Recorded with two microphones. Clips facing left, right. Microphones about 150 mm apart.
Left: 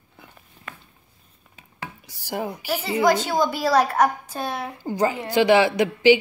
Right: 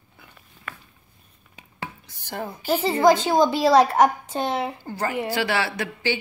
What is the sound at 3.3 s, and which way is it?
A woman's voice, 25° right (ahead or behind).